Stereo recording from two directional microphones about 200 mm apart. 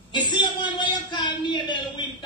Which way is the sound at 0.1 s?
20° left (ahead or behind).